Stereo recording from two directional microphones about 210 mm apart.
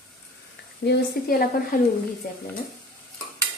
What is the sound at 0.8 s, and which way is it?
A woman's voice, 50° left (ahead or behind).